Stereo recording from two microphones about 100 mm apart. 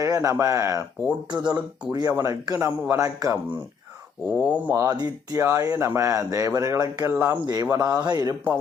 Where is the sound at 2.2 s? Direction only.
35° right (ahead or behind).